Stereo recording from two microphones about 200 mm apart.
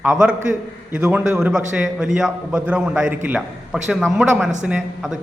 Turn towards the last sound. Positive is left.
turn(degrees=-5)  # may be behind; listen again after turning